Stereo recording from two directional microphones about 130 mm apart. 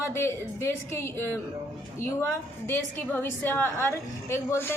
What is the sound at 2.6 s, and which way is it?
A woman's voice, 15° left (ahead or behind).